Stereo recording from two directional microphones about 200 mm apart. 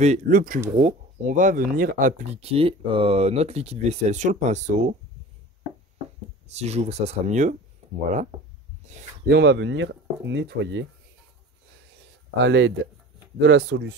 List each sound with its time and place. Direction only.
0.0 s speech: 40° right (ahead or behind)
0.7 s speech: 30° right (ahead or behind)
6.5 s speech: 30° right (ahead or behind)
8.8 s a man's voice: 35° right (ahead or behind)
9.3 s speech: 60° right (ahead or behind)
12.4 s speech: 65° right (ahead or behind)